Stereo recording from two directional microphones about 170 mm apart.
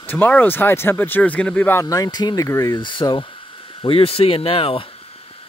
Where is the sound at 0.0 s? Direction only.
10° left (ahead or behind).